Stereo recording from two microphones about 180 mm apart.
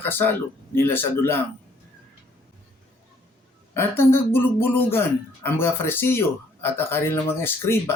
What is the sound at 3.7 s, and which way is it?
Speech, 10° left (ahead or behind).